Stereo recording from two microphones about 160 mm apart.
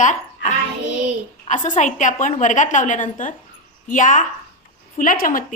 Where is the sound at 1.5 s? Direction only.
50° left (ahead or behind).